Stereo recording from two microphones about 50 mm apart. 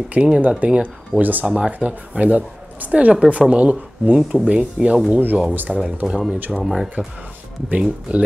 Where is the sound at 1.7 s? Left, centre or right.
Right.